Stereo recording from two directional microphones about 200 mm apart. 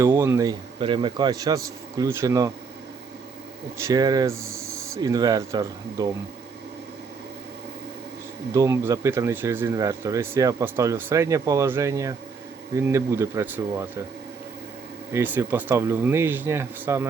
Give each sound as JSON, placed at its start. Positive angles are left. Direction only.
{"t": 0.0, "sound": "speech", "side_deg": -10}
{"t": 3.8, "sound": "speech", "side_deg": -15}
{"t": 8.5, "sound": "speech", "side_deg": -15}
{"t": 15.1, "sound": "speech", "side_deg": -10}